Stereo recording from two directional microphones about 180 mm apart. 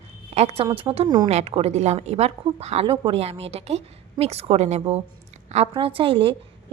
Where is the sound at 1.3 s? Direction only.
35° right (ahead or behind).